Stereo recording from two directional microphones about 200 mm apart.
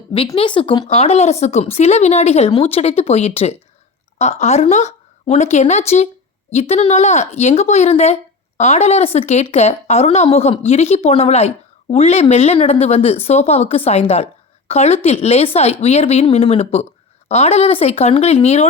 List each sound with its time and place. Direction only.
0.3 s a woman's voice: 25° left (ahead or behind)